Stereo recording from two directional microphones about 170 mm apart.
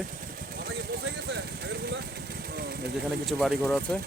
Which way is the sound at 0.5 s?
70° right (ahead or behind).